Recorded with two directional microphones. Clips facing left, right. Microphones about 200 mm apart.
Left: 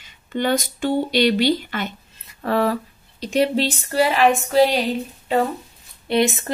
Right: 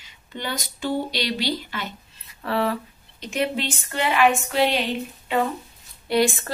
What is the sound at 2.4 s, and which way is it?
Speech, 45° left (ahead or behind).